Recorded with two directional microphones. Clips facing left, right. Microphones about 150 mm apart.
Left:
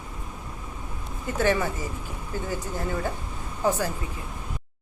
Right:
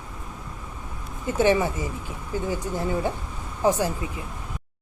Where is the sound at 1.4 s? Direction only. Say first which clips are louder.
Right 4 dB; 20° right (ahead or behind).